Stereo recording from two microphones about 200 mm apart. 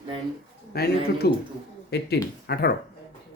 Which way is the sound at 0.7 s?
55° left (ahead or behind).